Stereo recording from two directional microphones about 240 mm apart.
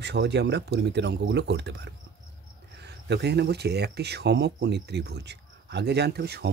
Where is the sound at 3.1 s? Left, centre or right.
Right.